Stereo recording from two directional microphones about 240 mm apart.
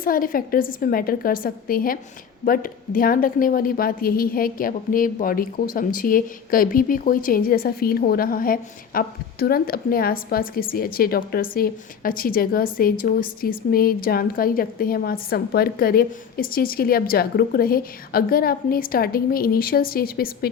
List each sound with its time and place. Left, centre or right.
0.0 s a woman's voice: left